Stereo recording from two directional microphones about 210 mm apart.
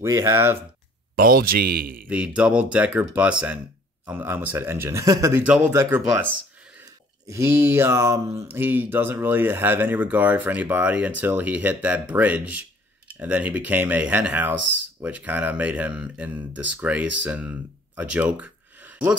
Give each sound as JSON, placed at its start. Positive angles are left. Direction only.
{"t": 0.0, "sound": "mantra", "side_deg": -15}
{"t": 1.1, "sound": "speech", "side_deg": -45}
{"t": 2.0, "sound": "speech", "side_deg": -5}
{"t": 4.0, "sound": "mantra", "side_deg": -10}
{"t": 7.2, "sound": "mantra", "side_deg": -10}